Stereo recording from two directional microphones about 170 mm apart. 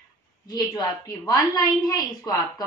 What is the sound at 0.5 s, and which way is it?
A woman's voice, 25° left (ahead or behind).